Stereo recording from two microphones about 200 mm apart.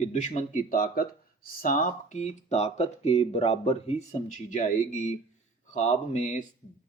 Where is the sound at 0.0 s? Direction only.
35° left (ahead or behind).